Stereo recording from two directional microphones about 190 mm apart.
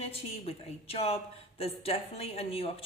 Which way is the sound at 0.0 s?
30° left (ahead or behind).